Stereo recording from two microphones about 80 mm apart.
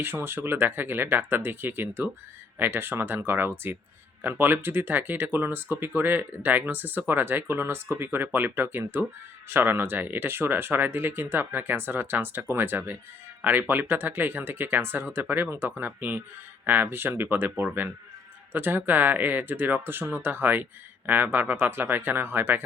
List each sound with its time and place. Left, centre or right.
0.0 s speech: right